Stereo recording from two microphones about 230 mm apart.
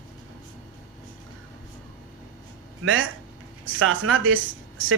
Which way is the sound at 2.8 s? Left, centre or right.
Right.